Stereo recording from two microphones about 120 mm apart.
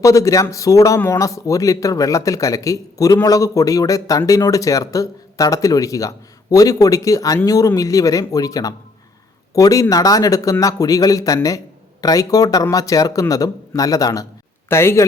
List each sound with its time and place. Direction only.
0.0 s speech: 25° left (ahead or behind)